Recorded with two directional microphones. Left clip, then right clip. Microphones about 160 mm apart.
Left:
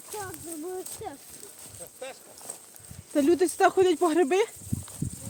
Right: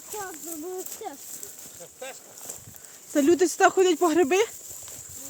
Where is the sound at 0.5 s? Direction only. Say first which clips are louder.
Right 1 dB; 75° right (ahead or behind).